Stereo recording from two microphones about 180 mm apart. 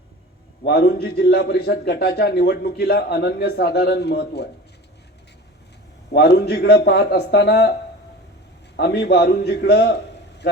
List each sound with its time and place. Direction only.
0.6 s a man's voice: 65° left (ahead or behind)
6.1 s a man's voice: 65° left (ahead or behind)
8.7 s a man's voice: 65° left (ahead or behind)